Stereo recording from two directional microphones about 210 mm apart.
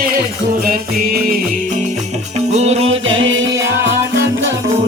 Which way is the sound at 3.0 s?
65° right (ahead or behind).